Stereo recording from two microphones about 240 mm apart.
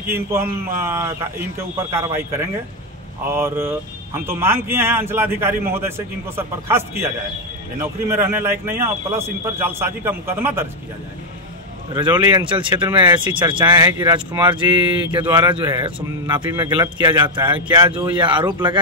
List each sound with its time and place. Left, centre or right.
0.1 s a man's voice: centre
12.3 s speech: centre